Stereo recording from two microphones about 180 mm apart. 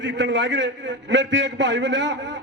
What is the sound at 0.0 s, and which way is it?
A man's voice, 90° right.